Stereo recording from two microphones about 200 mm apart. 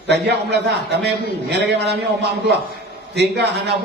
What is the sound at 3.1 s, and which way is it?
Speech, 55° right (ahead or behind).